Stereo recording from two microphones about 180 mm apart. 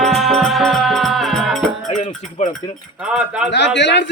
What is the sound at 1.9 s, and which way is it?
Cowbell, 40° left (ahead or behind).